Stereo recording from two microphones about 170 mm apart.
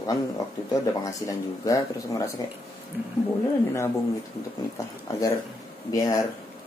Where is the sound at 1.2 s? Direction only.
20° left (ahead or behind).